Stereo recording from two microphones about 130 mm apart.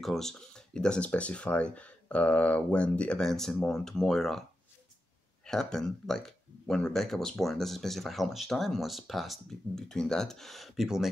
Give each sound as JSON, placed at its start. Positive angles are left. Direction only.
{"t": 0.0, "sound": "speech", "side_deg": 5}